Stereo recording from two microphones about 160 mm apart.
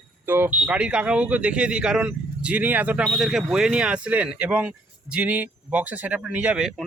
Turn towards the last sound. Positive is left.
turn(degrees=-5)  # may be behind; listen again after turning